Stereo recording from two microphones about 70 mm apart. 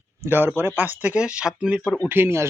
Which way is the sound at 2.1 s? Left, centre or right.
Right.